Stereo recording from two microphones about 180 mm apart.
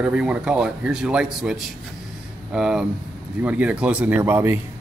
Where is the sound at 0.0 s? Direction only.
5° right (ahead or behind).